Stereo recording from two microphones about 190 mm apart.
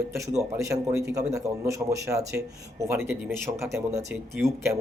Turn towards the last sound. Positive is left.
turn(degrees=-15)  # may be behind; listen again after turning